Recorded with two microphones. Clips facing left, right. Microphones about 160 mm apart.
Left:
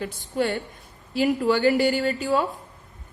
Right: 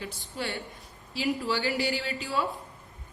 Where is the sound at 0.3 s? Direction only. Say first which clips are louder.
Left 10 dB; 50° left (ahead or behind).